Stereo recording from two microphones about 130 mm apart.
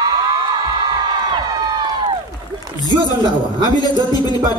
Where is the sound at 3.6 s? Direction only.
30° left (ahead or behind).